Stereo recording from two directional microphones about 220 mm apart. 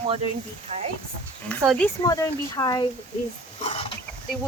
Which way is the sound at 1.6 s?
5° left (ahead or behind).